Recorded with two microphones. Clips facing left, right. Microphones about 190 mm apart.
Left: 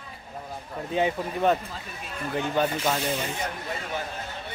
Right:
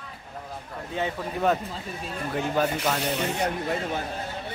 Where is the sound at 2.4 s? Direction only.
Centre (ahead or behind).